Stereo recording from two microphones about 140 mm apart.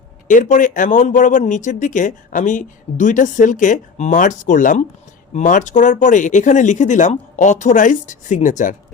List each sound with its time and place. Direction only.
0.3 s speech: 65° left (ahead or behind)